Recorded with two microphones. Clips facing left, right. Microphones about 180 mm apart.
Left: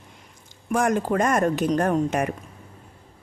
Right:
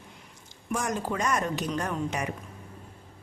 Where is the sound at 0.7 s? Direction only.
55° left (ahead or behind).